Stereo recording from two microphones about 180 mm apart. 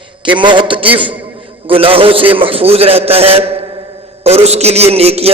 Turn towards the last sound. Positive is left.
turn(degrees=-35)  # may be behind; listen again after turning